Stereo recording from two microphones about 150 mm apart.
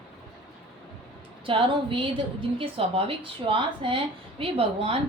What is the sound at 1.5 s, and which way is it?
A woman's voice, 35° right (ahead or behind).